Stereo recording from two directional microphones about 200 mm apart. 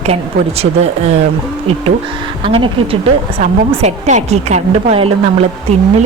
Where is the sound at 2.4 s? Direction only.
25° right (ahead or behind).